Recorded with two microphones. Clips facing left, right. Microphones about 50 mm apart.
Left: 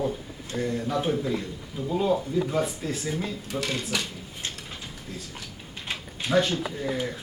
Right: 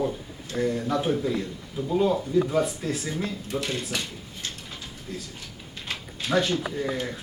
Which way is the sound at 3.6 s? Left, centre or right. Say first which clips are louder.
Left 1 dB; left.